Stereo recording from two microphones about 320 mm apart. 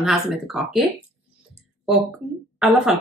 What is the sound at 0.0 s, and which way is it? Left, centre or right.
Speech, centre.